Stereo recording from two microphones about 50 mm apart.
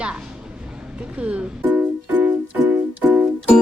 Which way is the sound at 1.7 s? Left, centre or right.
Right.